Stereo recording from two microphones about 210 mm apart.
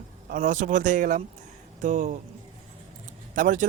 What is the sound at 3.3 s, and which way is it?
Speech, 40° right (ahead or behind).